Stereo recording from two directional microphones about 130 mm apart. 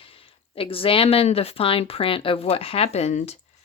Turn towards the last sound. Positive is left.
turn(degrees=55)  # may be behind; listen again after turning